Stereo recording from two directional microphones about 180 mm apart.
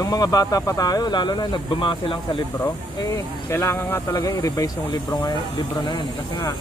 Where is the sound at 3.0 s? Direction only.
20° left (ahead or behind).